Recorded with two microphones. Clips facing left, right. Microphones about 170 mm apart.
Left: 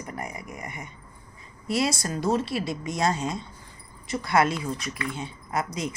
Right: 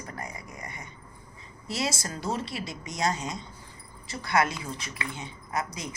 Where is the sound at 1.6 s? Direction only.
25° right (ahead or behind).